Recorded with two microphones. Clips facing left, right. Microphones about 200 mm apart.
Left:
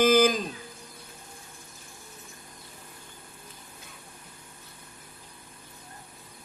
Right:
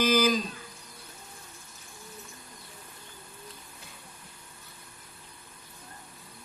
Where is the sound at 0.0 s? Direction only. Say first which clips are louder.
Left 4 dB; 50° left (ahead or behind).